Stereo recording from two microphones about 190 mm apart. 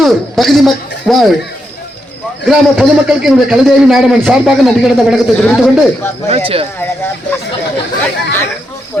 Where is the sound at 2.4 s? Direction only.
Centre (ahead or behind).